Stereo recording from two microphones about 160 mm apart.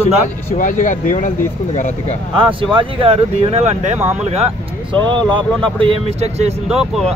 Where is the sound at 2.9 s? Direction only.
35° right (ahead or behind).